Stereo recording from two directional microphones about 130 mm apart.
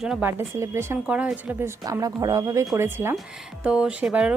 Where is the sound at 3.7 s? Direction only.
5° right (ahead or behind).